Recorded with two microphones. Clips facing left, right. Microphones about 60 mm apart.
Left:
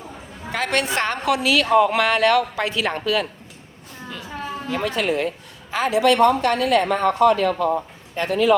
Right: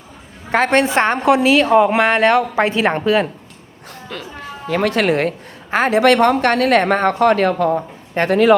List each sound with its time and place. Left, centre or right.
0.5 s a woman's voice: right
4.1 s speech: right
5.7 s speech: right